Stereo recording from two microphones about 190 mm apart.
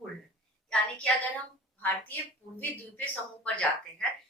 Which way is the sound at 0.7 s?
5° left (ahead or behind).